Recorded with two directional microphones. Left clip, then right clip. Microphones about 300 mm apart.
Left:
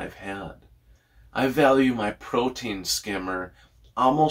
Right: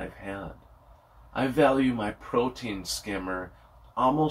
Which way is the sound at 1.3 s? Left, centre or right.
Centre.